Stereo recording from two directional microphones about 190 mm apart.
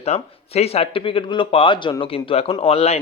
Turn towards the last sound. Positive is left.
turn(degrees=35)  # may be behind; listen again after turning